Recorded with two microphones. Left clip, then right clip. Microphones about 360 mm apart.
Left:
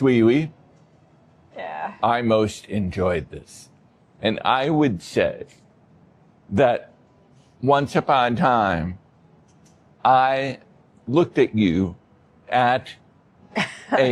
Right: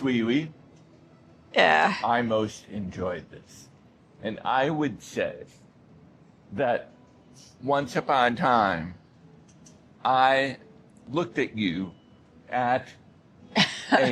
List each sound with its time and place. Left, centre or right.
0.0 s speech: left
1.5 s speech: right
2.0 s speech: left
6.6 s speech: left
10.0 s speech: left
13.5 s cough: centre